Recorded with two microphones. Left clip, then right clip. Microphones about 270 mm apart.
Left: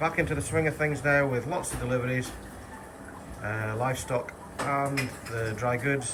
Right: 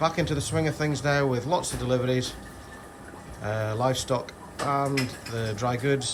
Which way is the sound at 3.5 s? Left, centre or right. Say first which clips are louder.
Right 4 dB; centre.